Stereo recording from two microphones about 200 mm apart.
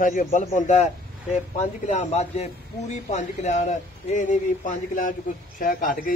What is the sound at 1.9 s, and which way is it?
A man's voice, 35° left (ahead or behind).